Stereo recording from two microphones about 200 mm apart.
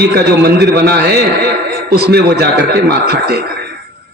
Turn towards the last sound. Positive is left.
turn(degrees=-50)  # may be behind; listen again after turning